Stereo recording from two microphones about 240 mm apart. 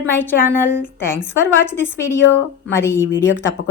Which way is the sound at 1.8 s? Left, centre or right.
Centre.